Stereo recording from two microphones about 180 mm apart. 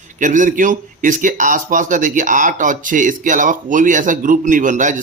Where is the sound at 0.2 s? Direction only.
45° right (ahead or behind).